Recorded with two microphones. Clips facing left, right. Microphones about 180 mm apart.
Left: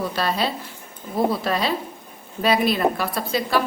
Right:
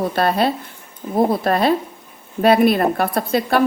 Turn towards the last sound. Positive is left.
turn(degrees=-55)  # may be behind; listen again after turning